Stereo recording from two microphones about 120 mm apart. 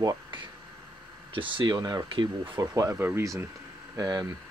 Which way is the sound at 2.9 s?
20° right (ahead or behind).